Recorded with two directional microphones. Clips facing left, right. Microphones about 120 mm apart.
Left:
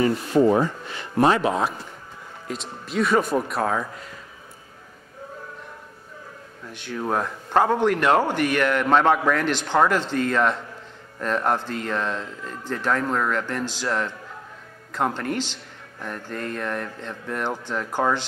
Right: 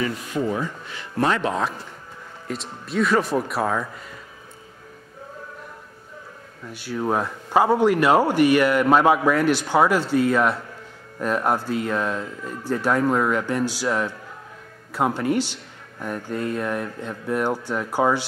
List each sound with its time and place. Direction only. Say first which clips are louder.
0.0 s speech: left 6 dB; 35° left (ahead or behind)
1.1 s speech: left 3 dB; 15° left (ahead or behind)
2.4 s speech: right 1 dB; centre (ahead or behind)
6.6 s a man's voice: right 3 dB; 5° right (ahead or behind)